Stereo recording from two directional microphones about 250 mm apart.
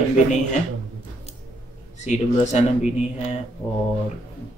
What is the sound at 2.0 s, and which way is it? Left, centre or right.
Speech, left.